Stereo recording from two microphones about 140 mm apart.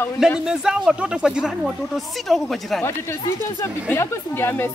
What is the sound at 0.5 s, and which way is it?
Speech, 5° right (ahead or behind).